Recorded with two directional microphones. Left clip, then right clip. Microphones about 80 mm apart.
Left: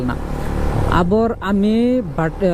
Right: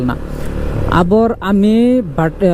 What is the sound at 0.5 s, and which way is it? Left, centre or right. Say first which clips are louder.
Vehicle: even; left.